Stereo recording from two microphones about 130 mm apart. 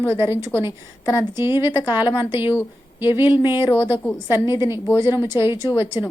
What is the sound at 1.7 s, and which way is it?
Speech, 30° left (ahead or behind).